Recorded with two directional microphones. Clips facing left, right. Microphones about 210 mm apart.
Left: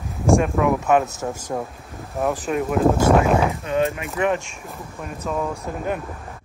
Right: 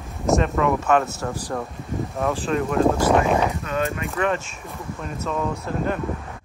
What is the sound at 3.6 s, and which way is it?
Speech, 15° left (ahead or behind).